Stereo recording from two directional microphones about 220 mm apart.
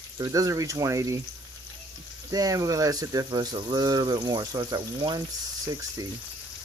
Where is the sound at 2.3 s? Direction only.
15° right (ahead or behind).